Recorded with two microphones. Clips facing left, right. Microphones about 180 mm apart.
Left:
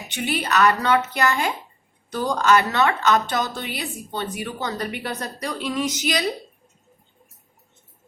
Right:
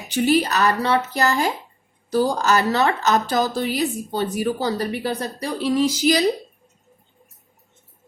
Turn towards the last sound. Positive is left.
turn(degrees=-35)  # may be behind; listen again after turning